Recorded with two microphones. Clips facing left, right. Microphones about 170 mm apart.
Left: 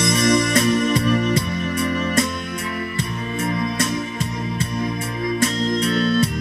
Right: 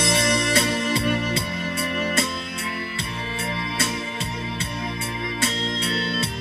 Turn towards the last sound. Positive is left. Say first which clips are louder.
# left 8 dB
turn(degrees=-30)  # may be behind; listen again after turning